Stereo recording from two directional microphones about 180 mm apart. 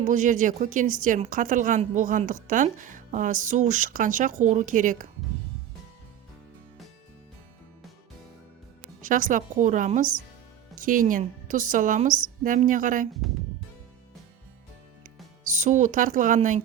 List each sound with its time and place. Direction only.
0.0 s a woman's voice: 45° right (ahead or behind)
9.0 s a woman's voice: 45° right (ahead or behind)
15.0 s speech: 45° right (ahead or behind)